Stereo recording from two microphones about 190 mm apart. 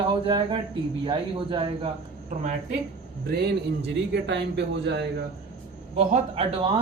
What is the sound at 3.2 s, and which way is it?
Speech, 55° right (ahead or behind).